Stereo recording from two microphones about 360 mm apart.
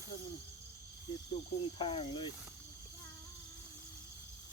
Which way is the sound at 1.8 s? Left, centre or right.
Centre.